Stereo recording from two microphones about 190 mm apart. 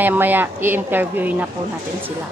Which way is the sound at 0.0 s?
10° right (ahead or behind).